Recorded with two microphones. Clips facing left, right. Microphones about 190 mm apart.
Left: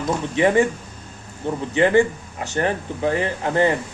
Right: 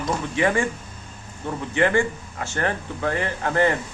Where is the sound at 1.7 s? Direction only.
20° left (ahead or behind).